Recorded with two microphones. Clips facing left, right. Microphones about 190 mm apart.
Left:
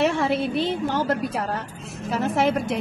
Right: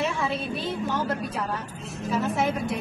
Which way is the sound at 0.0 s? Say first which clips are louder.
Left 6 dB; 70° left (ahead or behind).